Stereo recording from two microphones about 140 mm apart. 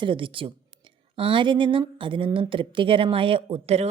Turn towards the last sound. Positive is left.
turn(degrees=-45)  # may be behind; listen again after turning